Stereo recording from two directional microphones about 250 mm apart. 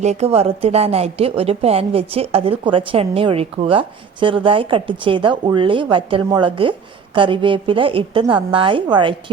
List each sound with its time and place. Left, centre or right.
0.0 s a woman's voice: right